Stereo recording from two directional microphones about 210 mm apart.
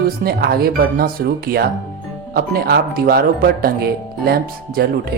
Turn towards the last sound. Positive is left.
turn(degrees=-45)  # may be behind; listen again after turning